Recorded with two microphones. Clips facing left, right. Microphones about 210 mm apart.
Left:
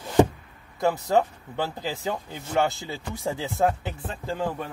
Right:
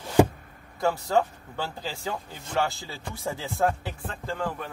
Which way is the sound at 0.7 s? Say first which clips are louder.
Left 2 dB; 20° left (ahead or behind).